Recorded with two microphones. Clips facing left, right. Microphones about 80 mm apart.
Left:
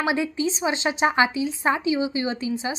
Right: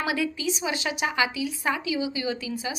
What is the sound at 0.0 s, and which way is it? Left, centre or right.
A woman's voice, left.